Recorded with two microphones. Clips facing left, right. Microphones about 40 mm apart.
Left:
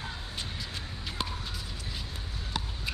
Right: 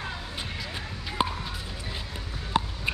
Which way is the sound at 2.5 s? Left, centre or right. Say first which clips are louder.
Right 10 dB; right.